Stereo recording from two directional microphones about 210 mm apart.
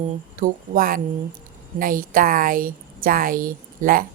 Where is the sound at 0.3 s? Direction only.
40° right (ahead or behind).